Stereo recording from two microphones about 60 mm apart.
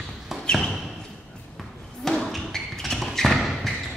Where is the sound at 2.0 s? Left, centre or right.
Centre.